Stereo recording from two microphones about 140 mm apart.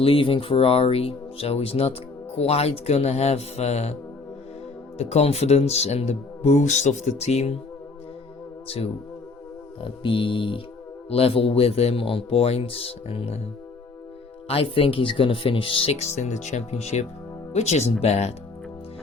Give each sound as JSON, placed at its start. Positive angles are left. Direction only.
{"t": 0.0, "sound": "speech", "side_deg": 40}
{"t": 4.9, "sound": "speech", "side_deg": 50}
{"t": 8.6, "sound": "music", "side_deg": 45}
{"t": 11.1, "sound": "speech", "side_deg": 45}
{"t": 14.4, "sound": "speech", "side_deg": 40}